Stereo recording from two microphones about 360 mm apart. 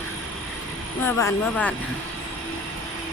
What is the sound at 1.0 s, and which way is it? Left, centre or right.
Speech, centre.